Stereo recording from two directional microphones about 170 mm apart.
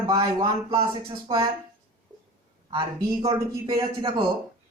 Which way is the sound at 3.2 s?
25° right (ahead or behind).